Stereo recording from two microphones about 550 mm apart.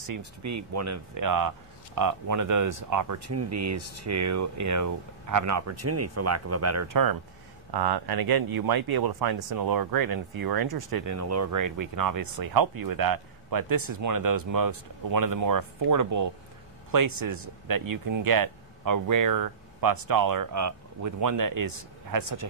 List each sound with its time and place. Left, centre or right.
0.0 s speech: right